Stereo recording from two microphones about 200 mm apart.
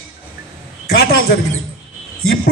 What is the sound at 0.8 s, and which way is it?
Speech, 50° left (ahead or behind).